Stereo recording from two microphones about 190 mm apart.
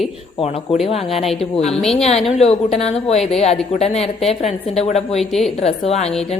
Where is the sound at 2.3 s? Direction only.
35° left (ahead or behind).